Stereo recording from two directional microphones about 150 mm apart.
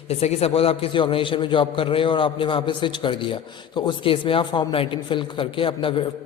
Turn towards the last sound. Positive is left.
turn(degrees=35)  # may be behind; listen again after turning